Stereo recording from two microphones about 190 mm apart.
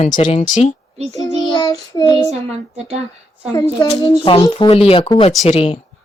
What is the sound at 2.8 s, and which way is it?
Speech, 35° right (ahead or behind).